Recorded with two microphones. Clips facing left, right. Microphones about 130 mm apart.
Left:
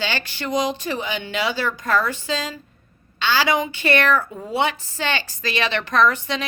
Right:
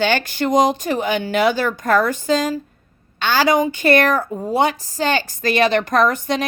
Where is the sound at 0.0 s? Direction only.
45° right (ahead or behind).